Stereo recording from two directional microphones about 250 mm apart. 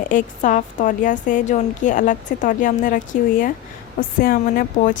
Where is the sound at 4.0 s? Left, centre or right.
Left.